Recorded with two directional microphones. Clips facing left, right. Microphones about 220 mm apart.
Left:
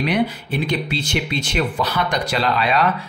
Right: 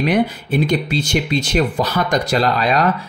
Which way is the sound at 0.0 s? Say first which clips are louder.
Right 3 dB; 45° right (ahead or behind).